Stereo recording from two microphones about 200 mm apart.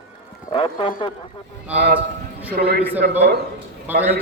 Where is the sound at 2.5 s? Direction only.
50° right (ahead or behind).